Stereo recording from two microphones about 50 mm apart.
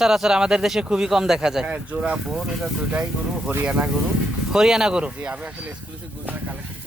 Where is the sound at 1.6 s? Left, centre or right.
Right.